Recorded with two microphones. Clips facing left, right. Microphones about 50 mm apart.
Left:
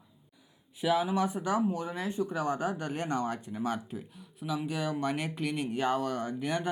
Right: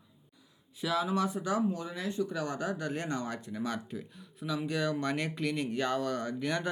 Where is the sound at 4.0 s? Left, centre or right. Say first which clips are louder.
Even; centre.